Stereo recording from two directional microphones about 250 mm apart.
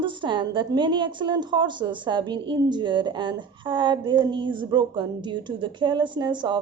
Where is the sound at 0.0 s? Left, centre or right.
Centre.